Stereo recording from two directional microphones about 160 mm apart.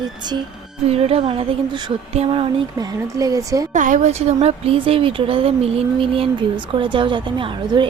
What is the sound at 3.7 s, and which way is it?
Speech, 50° right (ahead or behind).